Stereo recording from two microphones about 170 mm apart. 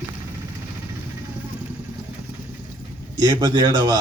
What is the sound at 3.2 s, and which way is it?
Speech, 20° right (ahead or behind).